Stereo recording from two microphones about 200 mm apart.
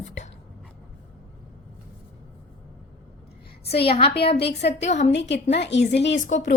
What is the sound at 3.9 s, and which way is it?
Speech, 30° left (ahead or behind).